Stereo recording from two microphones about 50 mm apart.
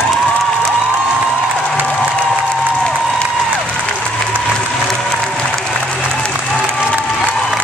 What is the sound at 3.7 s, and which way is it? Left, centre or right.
Applause, left.